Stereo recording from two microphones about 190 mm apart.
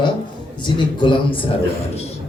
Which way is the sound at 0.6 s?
25° left (ahead or behind).